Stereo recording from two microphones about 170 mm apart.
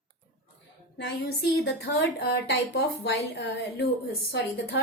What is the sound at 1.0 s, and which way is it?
A woman's voice, 80° left.